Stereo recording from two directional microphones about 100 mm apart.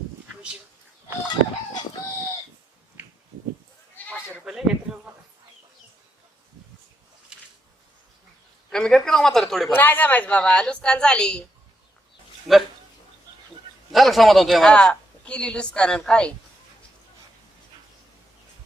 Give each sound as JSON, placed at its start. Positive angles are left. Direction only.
{"t": 3.0, "sound": "a sound", "side_deg": -15}
{"t": 3.9, "sound": "goat", "side_deg": 15}
{"t": 4.4, "sound": "a sound", "side_deg": -5}
{"t": 8.7, "sound": "speech", "side_deg": 5}
{"t": 9.7, "sound": "a woman's voice", "side_deg": 20}
{"t": 12.5, "sound": "speech", "side_deg": 0}
{"t": 13.9, "sound": "a woman's voice", "side_deg": 0}